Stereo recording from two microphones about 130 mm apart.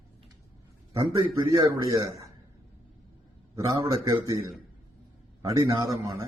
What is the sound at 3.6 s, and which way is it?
A man's voice, 25° right (ahead or behind).